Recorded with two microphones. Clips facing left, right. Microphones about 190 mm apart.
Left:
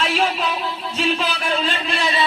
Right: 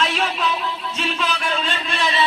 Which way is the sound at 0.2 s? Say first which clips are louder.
Left 2 dB; 35° left (ahead or behind).